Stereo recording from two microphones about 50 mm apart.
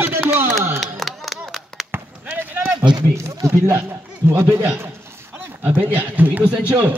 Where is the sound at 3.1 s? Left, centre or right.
Right.